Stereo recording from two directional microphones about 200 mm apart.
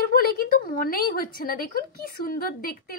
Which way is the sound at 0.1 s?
45° left (ahead or behind).